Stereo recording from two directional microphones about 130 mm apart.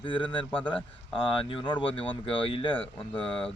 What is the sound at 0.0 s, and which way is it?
A man's voice, 40° left (ahead or behind).